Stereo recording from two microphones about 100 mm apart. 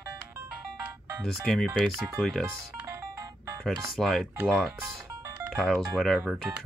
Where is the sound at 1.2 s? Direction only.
5° left (ahead or behind).